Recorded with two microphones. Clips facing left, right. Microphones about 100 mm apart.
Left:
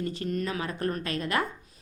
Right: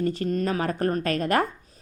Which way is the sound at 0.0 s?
40° right (ahead or behind).